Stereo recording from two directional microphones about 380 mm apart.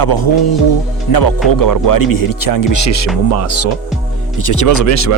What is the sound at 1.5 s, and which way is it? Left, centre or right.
Speech, left.